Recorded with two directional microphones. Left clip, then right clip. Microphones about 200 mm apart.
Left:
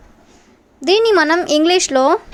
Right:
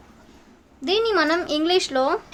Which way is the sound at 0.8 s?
35° left (ahead or behind).